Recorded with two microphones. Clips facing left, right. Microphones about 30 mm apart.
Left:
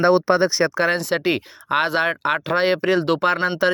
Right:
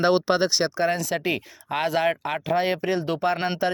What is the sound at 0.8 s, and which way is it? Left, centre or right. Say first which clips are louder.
Speech: left 4 dB; left.